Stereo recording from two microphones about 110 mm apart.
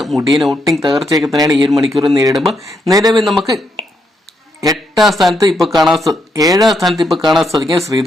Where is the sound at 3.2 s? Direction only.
Centre (ahead or behind).